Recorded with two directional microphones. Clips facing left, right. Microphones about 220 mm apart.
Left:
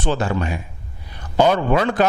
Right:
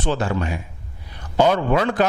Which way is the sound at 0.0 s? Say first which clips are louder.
Left 1 dB; 15° left (ahead or behind).